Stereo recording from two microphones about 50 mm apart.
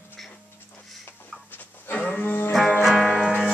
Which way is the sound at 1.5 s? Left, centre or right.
Left.